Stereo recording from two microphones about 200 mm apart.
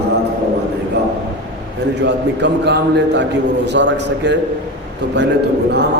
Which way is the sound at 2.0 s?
60° right (ahead or behind).